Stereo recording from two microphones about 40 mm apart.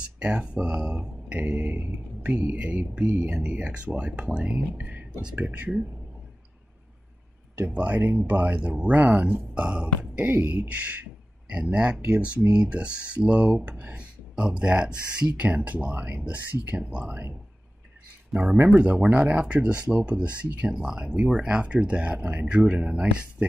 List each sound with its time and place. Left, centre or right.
0.2 s speech: right
1.3 s speech: right
4.6 s speech: right
7.6 s speech: right
9.6 s speech: right
10.2 s speech: right
14.3 s speech: right
18.3 s speech: centre
19.0 s speech: right